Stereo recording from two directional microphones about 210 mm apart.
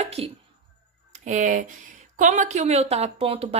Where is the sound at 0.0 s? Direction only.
30° right (ahead or behind).